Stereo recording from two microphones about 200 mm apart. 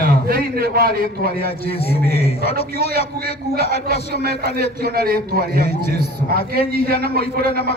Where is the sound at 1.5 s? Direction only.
30° left (ahead or behind).